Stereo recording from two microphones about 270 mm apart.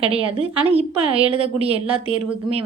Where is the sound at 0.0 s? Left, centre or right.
Right.